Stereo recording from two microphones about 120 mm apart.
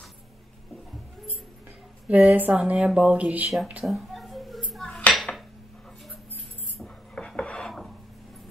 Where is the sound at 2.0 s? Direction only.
10° right (ahead or behind).